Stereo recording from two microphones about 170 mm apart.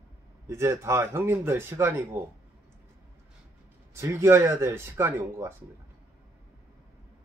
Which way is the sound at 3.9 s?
15° right (ahead or behind).